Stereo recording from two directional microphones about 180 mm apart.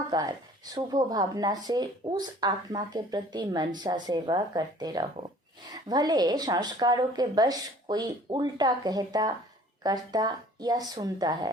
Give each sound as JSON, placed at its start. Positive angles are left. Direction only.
{"t": 0.1, "sound": "speech", "side_deg": -20}